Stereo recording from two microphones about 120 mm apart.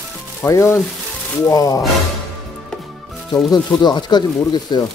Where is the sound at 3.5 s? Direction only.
35° left (ahead or behind).